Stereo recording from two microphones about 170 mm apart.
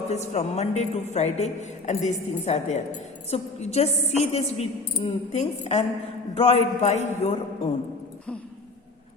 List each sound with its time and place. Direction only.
0.1 s a woman's voice: 40° left (ahead or behind)